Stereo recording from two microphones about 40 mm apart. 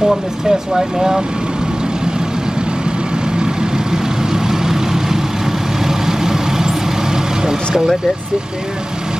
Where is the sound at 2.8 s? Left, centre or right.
Right.